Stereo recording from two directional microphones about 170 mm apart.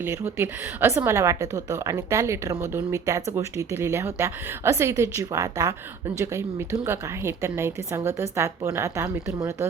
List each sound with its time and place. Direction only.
0.0 s a woman's voice: 15° right (ahead or behind)